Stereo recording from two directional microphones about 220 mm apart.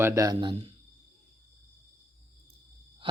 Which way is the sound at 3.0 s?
25° right (ahead or behind).